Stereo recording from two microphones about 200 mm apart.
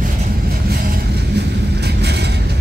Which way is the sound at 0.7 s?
55° right (ahead or behind).